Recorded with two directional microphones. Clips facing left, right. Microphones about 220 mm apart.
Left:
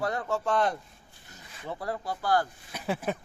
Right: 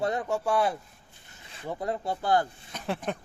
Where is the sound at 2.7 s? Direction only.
5° left (ahead or behind).